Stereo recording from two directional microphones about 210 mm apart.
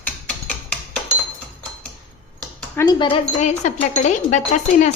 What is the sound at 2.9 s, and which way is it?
Speech, 25° left (ahead or behind).